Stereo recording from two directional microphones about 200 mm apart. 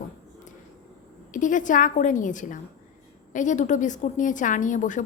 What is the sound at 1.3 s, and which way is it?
A woman's voice, 40° left (ahead or behind).